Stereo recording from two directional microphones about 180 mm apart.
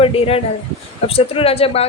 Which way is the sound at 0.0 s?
30° left (ahead or behind).